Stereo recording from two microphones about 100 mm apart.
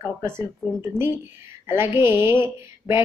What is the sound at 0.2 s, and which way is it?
A woman's voice, 25° right (ahead or behind).